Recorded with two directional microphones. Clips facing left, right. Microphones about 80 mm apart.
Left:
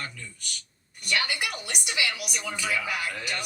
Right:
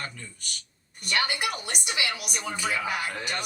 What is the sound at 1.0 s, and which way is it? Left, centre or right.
A woman's voice, right.